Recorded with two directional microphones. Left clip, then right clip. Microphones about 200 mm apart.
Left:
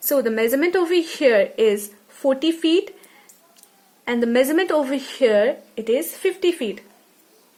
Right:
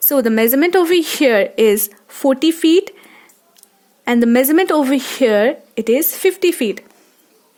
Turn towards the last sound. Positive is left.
turn(degrees=-55)  # may be behind; listen again after turning